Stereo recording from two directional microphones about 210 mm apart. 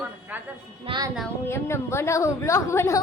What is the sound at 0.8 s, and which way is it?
Speech, 20° right (ahead or behind).